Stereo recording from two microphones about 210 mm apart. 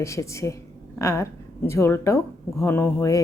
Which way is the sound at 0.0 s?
15° left (ahead or behind).